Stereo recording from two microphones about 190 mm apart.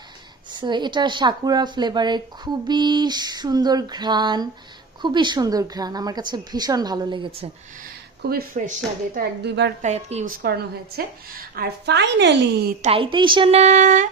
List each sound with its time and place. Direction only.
0.5 s speech: 25° right (ahead or behind)
8.2 s a woman's voice: 55° right (ahead or behind)
9.8 s a woman's voice: 35° right (ahead or behind)
10.3 s a woman's voice: 55° right (ahead or behind)
12.8 s a woman's voice: 25° right (ahead or behind)